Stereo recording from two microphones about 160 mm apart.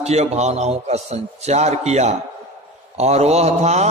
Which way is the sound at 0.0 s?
45° right (ahead or behind).